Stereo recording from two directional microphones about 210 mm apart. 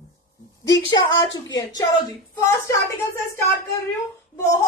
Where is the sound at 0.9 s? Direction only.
20° left (ahead or behind).